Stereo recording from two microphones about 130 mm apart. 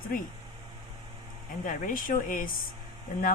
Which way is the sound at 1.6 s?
90° left.